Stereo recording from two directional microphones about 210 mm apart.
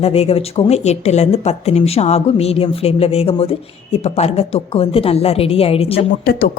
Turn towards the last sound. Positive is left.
turn(degrees=45)  # may be behind; listen again after turning